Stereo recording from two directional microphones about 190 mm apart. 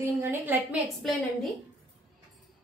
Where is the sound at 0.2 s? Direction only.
10° right (ahead or behind).